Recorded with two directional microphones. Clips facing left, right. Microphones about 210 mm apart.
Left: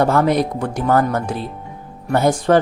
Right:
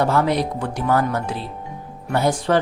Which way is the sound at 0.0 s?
50° left (ahead or behind).